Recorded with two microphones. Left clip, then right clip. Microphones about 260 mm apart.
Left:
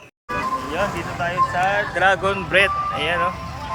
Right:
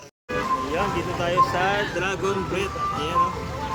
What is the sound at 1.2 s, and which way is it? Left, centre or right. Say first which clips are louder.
Speech: left 2 dB; centre.